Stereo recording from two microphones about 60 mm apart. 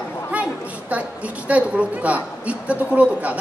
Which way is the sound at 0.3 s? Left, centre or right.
Right.